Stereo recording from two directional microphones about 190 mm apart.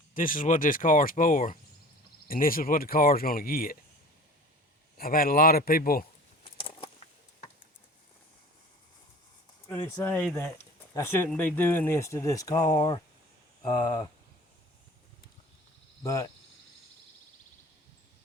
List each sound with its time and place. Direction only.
0.1 s speech: 45° left (ahead or behind)
4.9 s speech: 50° left (ahead or behind)
6.6 s a sound: 25° left (ahead or behind)
9.6 s speech: 10° left (ahead or behind)
16.0 s speech: 20° left (ahead or behind)